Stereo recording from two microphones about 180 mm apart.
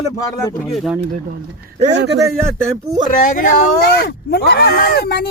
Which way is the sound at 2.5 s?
15° right (ahead or behind).